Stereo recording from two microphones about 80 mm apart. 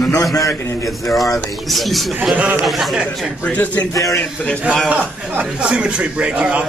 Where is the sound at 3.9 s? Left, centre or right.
Left.